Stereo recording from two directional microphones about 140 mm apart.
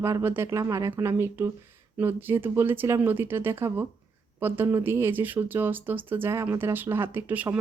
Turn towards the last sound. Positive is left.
turn(degrees=-15)  # may be behind; listen again after turning